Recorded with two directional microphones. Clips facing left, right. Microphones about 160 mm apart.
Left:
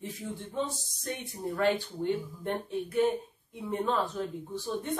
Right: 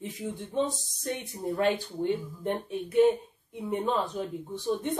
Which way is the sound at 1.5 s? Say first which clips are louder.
Right 1 dB; 20° right (ahead or behind).